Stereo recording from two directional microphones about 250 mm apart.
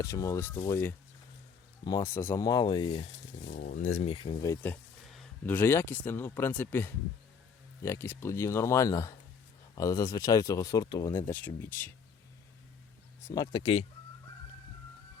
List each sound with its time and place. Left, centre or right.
0.0 s speech: centre
3.4 s speech: left; by 11.9 s centre
13.2 s speech: centre